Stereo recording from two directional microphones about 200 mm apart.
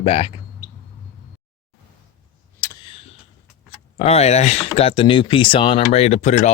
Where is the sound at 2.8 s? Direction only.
30° left (ahead or behind).